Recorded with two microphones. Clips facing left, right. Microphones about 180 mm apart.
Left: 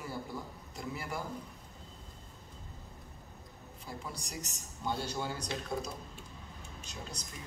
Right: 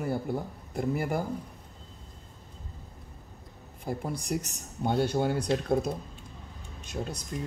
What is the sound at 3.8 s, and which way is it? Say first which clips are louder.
Speech: right 11 dB; 55° right (ahead or behind).